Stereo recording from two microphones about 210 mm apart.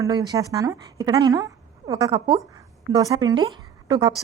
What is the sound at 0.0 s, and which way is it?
A woman's voice, 15° right (ahead or behind).